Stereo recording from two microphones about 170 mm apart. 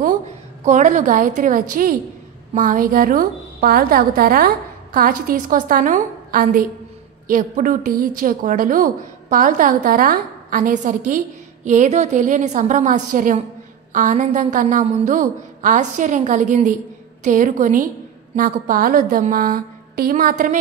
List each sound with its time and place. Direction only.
0.7 s a woman's voice: 45° right (ahead or behind)